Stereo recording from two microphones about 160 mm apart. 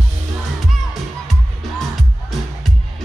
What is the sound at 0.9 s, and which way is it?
Music, centre (ahead or behind).